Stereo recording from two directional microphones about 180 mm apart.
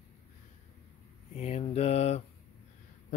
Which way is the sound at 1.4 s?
35° left (ahead or behind).